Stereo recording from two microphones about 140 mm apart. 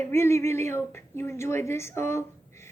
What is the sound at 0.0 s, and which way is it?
A woman's voice, 20° left (ahead or behind).